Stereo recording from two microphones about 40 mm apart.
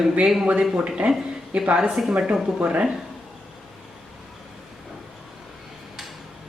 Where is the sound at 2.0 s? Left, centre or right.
Right.